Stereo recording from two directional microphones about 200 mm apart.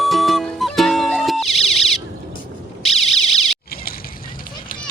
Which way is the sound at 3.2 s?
Centre (ahead or behind).